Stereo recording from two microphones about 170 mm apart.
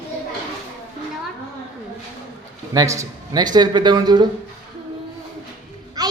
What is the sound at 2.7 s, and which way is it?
Speech, 20° right (ahead or behind).